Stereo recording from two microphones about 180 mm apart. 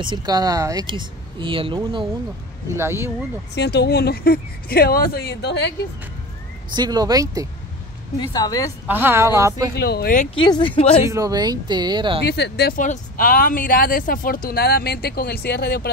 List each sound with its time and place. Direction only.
0.0 s speech: 25° right (ahead or behind)
2.7 s a woman's voice: 15° right (ahead or behind)
3.5 s speech: 70° left (ahead or behind)
6.7 s speech: 20° right (ahead or behind)
8.2 s speech: 20° left (ahead or behind)
8.8 s a woman's voice: 10° right (ahead or behind)
9.8 s speech: 60° left (ahead or behind)
10.3 s speech: 25° left (ahead or behind)
11.1 s speech: 20° right (ahead or behind)
12.3 s speech: 70° left (ahead or behind)